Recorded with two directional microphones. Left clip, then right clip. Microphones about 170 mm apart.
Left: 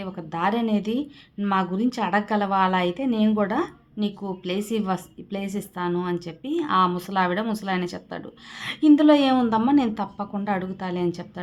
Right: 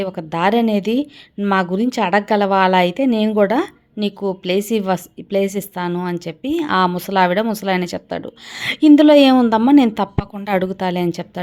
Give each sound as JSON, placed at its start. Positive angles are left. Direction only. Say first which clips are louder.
{"t": 0.0, "sound": "a woman's voice", "louder": "right 8 dB", "side_deg": -45}